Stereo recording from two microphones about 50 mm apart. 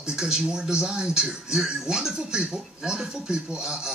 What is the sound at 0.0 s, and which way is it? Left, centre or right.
Speech, centre.